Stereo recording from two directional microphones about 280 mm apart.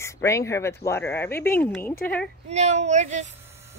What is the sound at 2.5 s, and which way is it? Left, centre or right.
Speech, right.